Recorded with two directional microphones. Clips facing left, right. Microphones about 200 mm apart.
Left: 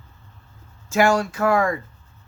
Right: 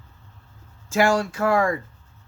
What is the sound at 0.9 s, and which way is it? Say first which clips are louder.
Speech: left 1 dB; 30° right (ahead or behind).